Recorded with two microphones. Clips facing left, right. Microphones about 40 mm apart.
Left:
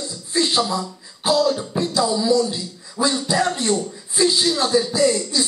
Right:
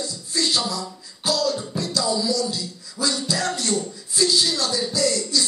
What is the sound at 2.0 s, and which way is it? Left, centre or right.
Speech, left.